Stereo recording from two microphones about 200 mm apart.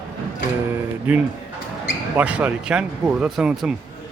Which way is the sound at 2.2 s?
5° right (ahead or behind).